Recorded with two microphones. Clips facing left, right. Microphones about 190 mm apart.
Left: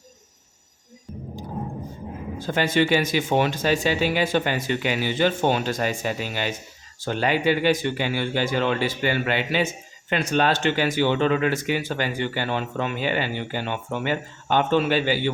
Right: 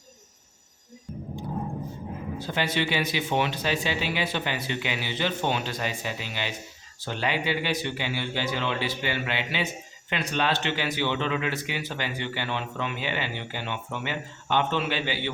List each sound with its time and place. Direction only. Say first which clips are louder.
2.4 s speech: left 7 dB; 45° left (ahead or behind)